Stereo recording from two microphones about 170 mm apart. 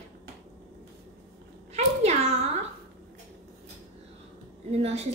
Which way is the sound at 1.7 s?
40° right (ahead or behind).